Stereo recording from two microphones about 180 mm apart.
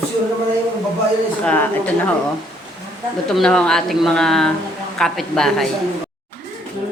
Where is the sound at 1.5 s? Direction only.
10° left (ahead or behind).